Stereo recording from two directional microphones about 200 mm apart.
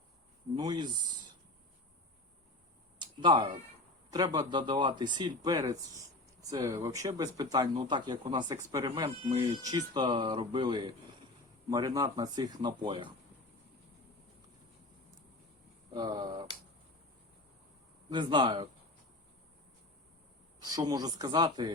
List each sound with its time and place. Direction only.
0.5 s speech: 20° right (ahead or behind)
3.0 s speech: 25° right (ahead or behind)
9.0 s speech: 30° right (ahead or behind)
15.9 s speech: 20° right (ahead or behind)
18.1 s speech: 20° right (ahead or behind)
20.7 s speech: 20° right (ahead or behind)